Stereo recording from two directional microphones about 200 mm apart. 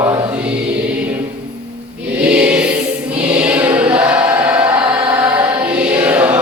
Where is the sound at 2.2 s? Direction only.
5° right (ahead or behind).